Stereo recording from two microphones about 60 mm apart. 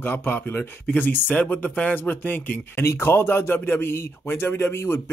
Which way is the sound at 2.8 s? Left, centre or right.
Left.